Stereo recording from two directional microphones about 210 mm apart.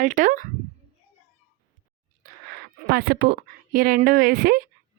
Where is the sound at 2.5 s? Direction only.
50° right (ahead or behind).